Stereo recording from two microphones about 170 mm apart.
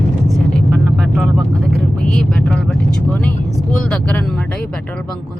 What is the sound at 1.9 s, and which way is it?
Speech, 5° left (ahead or behind).